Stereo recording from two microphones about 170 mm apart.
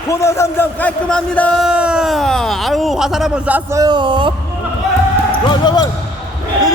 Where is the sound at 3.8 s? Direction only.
25° right (ahead or behind).